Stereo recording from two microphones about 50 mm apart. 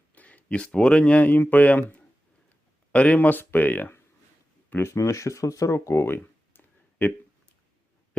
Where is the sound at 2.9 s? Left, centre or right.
Left.